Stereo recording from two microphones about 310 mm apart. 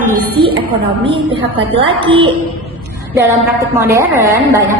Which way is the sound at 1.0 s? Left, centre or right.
Centre.